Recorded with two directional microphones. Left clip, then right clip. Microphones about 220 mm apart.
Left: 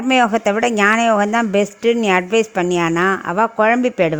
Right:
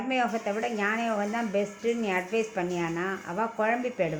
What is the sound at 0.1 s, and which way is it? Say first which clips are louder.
A woman's voice: left 14 dB; 50° left (ahead or behind).